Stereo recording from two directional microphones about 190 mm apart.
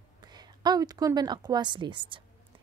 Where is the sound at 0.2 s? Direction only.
20° right (ahead or behind).